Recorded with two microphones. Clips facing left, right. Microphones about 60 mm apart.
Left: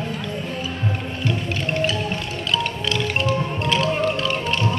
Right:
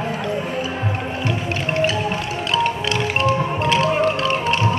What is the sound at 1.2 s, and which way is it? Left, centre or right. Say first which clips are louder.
Music: right 2 dB; centre.